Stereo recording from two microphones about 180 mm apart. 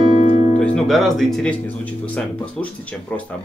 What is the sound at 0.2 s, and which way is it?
Music, 35° left (ahead or behind).